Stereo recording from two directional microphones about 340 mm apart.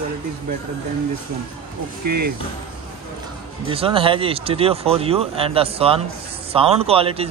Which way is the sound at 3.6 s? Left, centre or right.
Centre.